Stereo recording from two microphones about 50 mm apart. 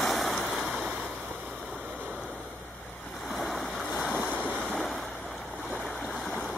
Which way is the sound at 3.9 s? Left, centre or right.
Centre.